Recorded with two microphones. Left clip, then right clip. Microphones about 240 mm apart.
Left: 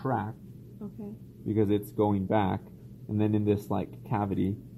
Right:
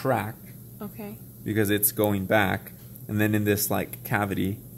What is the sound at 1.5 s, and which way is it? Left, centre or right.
Speech, centre.